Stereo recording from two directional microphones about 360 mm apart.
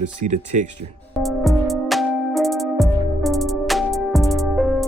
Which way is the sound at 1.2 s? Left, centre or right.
Centre.